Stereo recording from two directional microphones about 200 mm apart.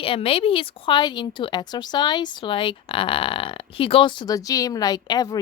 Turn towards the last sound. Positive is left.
turn(degrees=20)  # may be behind; listen again after turning